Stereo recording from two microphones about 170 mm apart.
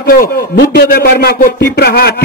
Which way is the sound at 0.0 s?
55° left (ahead or behind).